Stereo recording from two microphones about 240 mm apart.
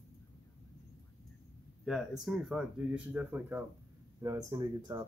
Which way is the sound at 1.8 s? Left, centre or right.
Centre.